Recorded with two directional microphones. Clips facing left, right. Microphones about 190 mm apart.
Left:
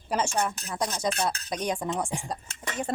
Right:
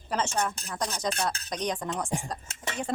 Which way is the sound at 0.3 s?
10° left (ahead or behind).